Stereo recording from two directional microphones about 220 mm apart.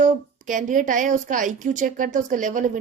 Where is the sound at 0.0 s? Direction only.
35° right (ahead or behind).